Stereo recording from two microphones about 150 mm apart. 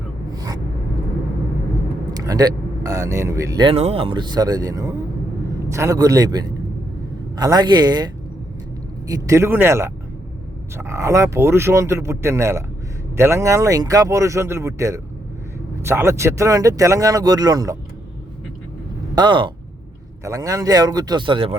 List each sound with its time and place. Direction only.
0.3 s a sound: 25° right (ahead or behind)
2.1 s speech: 25° right (ahead or behind)
3.7 s speech: 40° right (ahead or behind); by 17.7 s 25° right (ahead or behind)
19.1 s speech: 30° right (ahead or behind)